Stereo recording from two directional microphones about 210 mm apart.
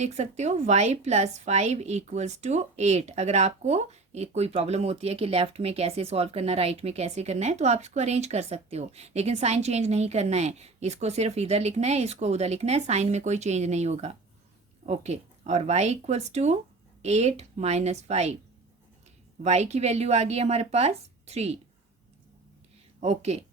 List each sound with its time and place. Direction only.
0.0 s a woman's voice: 30° right (ahead or behind)
19.4 s a woman's voice: 30° right (ahead or behind)
23.0 s speech: 30° right (ahead or behind)